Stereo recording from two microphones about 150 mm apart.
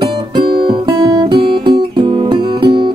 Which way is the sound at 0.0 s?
35° right (ahead or behind).